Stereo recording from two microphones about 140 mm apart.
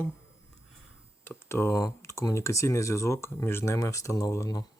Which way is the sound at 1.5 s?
20° left (ahead or behind).